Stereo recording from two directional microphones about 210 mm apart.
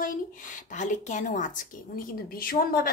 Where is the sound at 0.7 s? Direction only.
35° left (ahead or behind).